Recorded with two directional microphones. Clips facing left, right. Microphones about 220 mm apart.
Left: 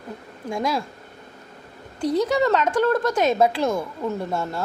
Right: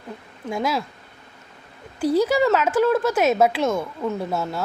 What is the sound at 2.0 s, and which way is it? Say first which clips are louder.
A woman's voice: right 2 dB; 5° right (ahead or behind).